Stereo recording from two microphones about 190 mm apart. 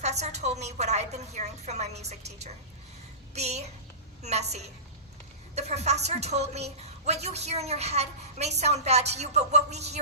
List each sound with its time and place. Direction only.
0.0 s a woman's voice: 35° right (ahead or behind)